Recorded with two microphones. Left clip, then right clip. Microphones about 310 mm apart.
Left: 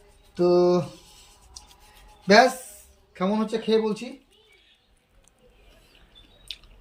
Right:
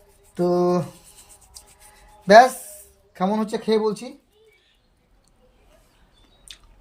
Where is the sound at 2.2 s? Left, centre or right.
Centre.